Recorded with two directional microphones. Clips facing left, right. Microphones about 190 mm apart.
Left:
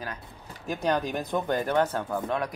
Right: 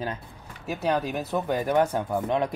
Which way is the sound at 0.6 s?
5° right (ahead or behind).